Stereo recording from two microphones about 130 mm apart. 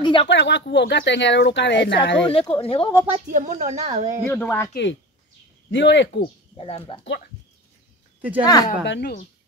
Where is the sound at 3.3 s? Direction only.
70° right (ahead or behind).